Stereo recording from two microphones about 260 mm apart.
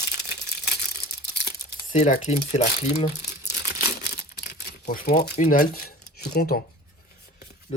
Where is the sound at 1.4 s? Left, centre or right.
Left.